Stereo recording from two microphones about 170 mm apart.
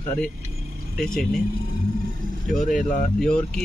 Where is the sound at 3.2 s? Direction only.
5° left (ahead or behind).